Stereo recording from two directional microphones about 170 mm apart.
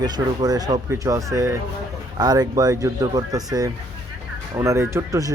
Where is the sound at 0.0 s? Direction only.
20° right (ahead or behind).